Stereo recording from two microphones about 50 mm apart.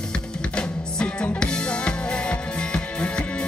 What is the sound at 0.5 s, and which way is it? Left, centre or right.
Music, centre.